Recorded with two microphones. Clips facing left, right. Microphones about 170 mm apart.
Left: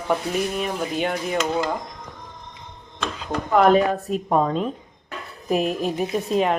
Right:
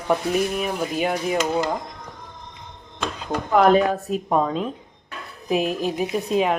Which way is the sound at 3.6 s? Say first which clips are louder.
Even; centre (ahead or behind).